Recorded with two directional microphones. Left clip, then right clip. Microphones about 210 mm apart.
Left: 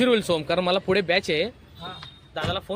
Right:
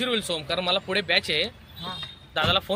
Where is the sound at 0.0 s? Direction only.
40° left (ahead or behind).